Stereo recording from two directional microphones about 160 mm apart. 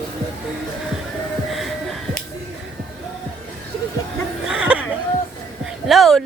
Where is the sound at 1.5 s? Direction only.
Centre (ahead or behind).